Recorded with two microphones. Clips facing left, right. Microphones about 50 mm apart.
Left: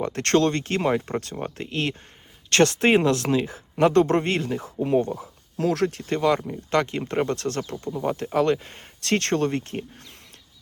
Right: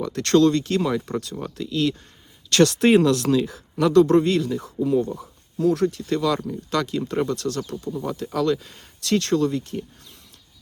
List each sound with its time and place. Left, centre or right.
0.0 s speech: left
5.1 s speech: left
6.0 s speech: left